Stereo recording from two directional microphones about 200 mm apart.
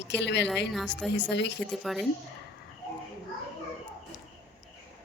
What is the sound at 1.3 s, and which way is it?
Speech, 60° left (ahead or behind).